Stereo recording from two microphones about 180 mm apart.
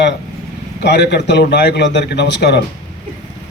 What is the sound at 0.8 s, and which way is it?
Speech, 70° left (ahead or behind).